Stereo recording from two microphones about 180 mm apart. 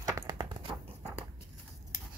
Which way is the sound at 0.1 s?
25° right (ahead or behind).